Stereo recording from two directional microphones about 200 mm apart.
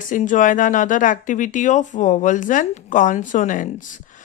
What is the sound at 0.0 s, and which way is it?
Speech, 40° left (ahead or behind).